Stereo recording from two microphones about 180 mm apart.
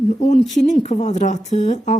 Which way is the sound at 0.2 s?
35° left (ahead or behind).